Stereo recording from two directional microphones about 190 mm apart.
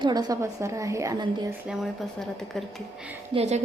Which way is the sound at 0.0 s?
20° right (ahead or behind).